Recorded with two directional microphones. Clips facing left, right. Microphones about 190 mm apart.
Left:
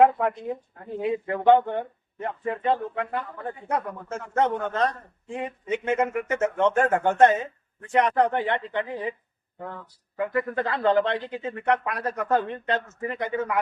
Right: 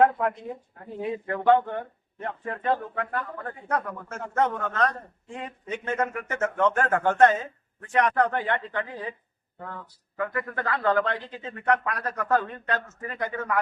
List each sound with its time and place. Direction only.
0.0 s speech: 20° left (ahead or behind)
10.2 s speech: 25° left (ahead or behind)